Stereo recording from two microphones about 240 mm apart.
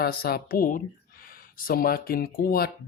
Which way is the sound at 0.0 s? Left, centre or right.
Left.